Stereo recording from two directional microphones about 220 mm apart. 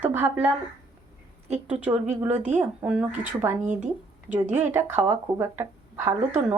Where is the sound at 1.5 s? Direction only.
30° right (ahead or behind).